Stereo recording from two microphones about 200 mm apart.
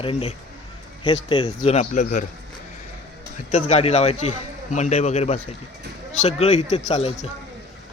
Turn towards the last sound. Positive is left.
turn(degrees=30)  # may be behind; listen again after turning